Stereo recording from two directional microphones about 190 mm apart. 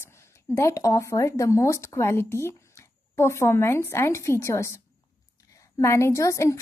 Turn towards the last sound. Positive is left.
turn(degrees=15)  # may be behind; listen again after turning